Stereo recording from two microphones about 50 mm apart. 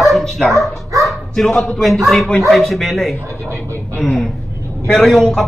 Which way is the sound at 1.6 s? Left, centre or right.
Centre.